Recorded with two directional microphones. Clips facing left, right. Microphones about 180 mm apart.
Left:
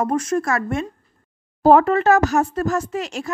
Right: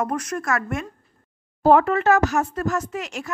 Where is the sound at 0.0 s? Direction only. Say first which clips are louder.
Left 5 dB; 30° left (ahead or behind).